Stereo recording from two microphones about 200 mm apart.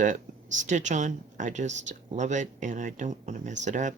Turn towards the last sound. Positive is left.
turn(degrees=-40)  # may be behind; listen again after turning